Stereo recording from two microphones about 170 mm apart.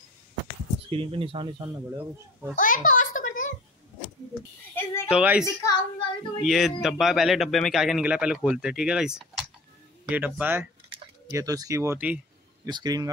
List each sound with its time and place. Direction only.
0.8 s speech: 30° right (ahead or behind)
1.9 s speech: 15° right (ahead or behind)
2.5 s a sound: 50° left (ahead or behind)
4.7 s a sound: 15° left (ahead or behind)
5.1 s speech: 10° right (ahead or behind)
5.4 s a woman's voice: 20° left (ahead or behind)
6.4 s a man's voice: centre (ahead or behind)
12.6 s a man's voice: 25° right (ahead or behind)